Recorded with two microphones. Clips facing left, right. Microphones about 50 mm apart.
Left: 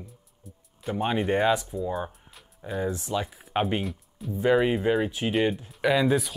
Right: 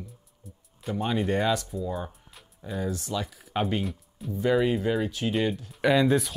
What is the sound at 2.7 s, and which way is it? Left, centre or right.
Speech, left.